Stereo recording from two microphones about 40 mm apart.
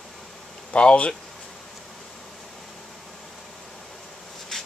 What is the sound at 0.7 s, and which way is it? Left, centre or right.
Speech, left.